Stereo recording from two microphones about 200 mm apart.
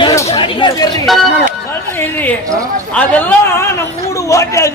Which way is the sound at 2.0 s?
10° left (ahead or behind).